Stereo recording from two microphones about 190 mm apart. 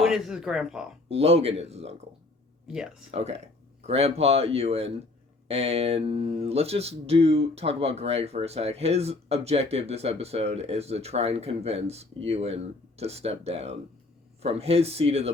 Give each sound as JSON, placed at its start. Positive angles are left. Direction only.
{"t": 0.0, "sound": "speech", "side_deg": -5}
{"t": 1.0, "sound": "speech", "side_deg": -30}
{"t": 2.6, "sound": "speech", "side_deg": -5}
{"t": 3.1, "sound": "speech", "side_deg": -30}